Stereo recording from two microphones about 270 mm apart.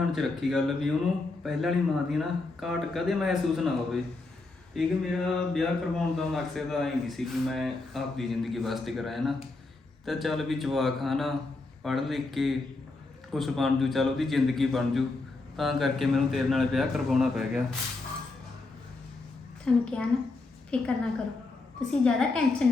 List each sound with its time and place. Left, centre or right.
0.1 s speech: centre
19.6 s a woman's voice: centre